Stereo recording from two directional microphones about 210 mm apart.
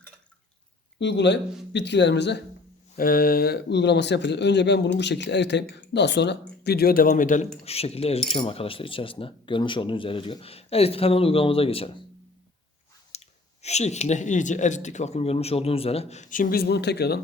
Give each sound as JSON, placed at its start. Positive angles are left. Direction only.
{"t": 0.9, "sound": "speech", "side_deg": 55}
{"t": 2.9, "sound": "speech", "side_deg": 45}
{"t": 13.1, "sound": "speech", "side_deg": 30}